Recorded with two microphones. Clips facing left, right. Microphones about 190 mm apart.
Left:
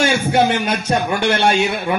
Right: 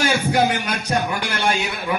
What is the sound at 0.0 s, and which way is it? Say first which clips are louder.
A man's voice: left 3 dB; 25° left (ahead or behind).